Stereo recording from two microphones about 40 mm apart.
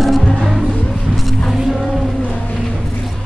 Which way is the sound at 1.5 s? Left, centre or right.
Centre.